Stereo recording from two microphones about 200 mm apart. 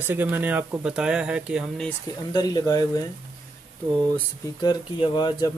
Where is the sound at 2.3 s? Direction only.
20° left (ahead or behind).